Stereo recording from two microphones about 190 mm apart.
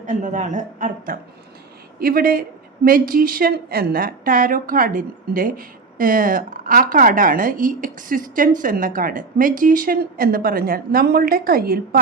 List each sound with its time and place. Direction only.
0.0 s a woman's voice: 45° right (ahead or behind)